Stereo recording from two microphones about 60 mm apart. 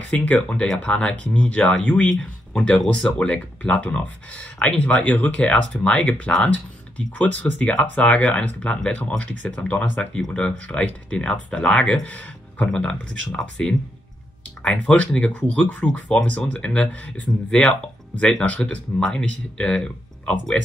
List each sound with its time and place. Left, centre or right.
0.1 s speech: left
18.9 s speech: centre